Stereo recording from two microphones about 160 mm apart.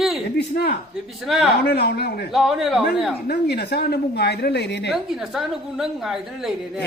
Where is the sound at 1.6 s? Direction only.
80° left.